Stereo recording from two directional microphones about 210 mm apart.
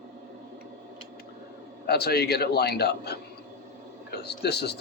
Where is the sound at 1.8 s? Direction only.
50° left (ahead or behind).